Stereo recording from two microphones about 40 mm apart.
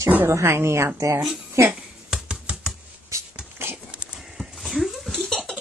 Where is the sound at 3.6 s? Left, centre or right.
Right.